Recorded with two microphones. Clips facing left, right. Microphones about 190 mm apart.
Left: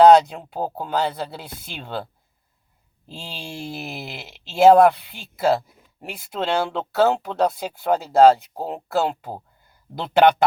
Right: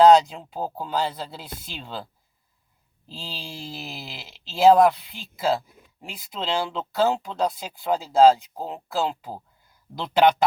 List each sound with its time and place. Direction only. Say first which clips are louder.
0.0 s speech: left 2 dB; 65° left (ahead or behind)
3.1 s speech: left 3 dB; 55° left (ahead or behind)